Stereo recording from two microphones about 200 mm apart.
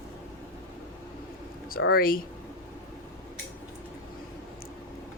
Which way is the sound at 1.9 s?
45° left (ahead or behind).